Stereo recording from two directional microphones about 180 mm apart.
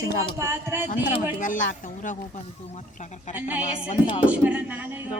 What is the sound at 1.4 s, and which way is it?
Speech, 45° left (ahead or behind).